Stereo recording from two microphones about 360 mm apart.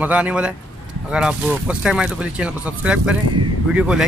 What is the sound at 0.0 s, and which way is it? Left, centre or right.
Speech, centre.